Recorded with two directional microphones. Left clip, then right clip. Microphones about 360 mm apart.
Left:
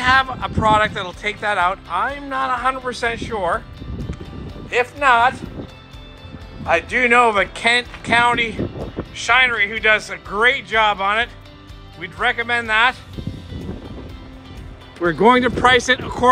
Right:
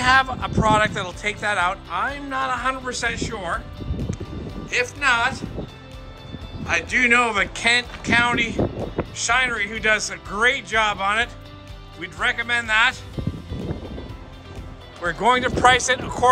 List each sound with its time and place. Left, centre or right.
0.0 s speech: centre
4.6 s speech: centre
6.6 s speech: centre
15.2 s speech: centre